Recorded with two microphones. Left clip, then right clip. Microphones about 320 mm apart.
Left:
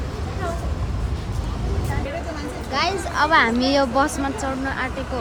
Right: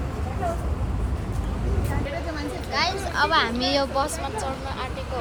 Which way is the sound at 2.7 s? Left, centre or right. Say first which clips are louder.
Left 3 dB; left.